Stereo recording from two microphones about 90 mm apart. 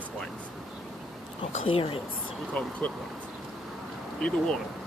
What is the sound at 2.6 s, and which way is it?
Speech, 15° left (ahead or behind).